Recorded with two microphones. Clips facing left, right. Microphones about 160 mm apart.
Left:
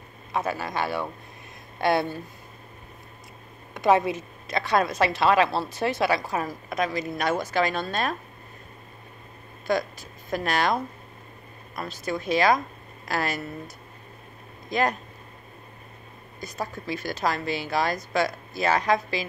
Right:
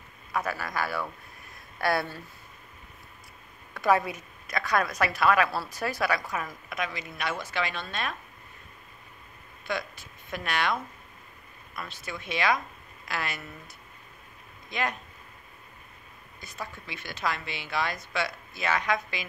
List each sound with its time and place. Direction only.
0.3 s a woman's voice: 25° left (ahead or behind)
3.7 s a woman's voice: 20° left (ahead or behind); by 8.2 s 40° left (ahead or behind)
9.7 s a woman's voice: 40° left (ahead or behind)
14.7 s speech: 40° left (ahead or behind)
16.3 s a woman's voice: 40° left (ahead or behind)